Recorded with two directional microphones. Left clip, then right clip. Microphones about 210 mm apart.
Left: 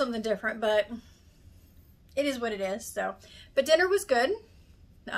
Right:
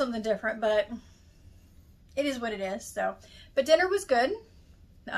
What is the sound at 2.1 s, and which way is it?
A woman's voice, 20° left (ahead or behind).